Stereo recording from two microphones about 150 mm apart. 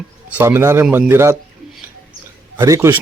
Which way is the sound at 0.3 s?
15° right (ahead or behind).